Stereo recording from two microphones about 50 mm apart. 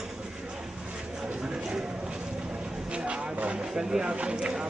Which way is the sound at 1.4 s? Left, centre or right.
Centre.